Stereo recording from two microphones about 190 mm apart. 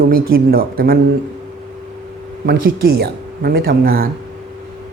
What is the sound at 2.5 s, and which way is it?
Speech, 55° right (ahead or behind).